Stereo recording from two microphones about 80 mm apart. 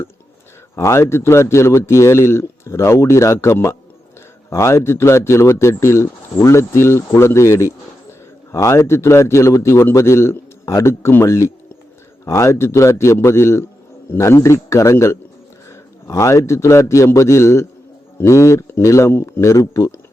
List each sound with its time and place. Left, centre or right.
0.8 s speech: left